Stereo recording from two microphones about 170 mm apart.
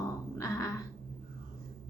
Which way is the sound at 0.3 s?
15° left (ahead or behind).